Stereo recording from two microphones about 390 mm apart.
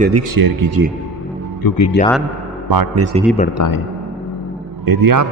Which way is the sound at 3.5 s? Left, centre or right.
Left.